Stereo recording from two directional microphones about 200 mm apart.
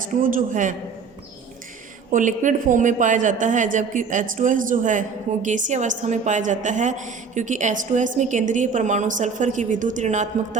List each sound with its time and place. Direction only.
0.2 s a woman's voice: 40° right (ahead or behind)
2.1 s a woman's voice: 40° right (ahead or behind)